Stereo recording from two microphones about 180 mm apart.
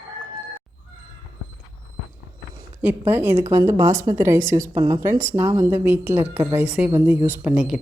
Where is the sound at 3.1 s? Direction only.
10° right (ahead or behind).